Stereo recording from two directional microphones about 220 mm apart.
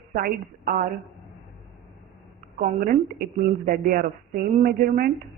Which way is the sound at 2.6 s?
40° right (ahead or behind).